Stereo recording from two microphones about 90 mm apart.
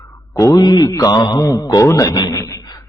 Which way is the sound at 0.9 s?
35° left (ahead or behind).